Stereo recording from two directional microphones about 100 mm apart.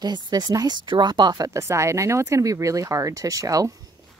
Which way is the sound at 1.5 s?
30° right (ahead or behind).